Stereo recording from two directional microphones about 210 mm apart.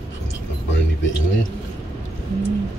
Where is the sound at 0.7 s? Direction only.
65° left (ahead or behind).